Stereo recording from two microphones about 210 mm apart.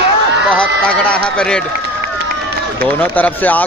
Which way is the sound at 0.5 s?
5° left (ahead or behind).